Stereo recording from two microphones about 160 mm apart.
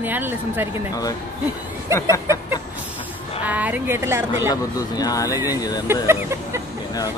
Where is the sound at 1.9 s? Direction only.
15° right (ahead or behind).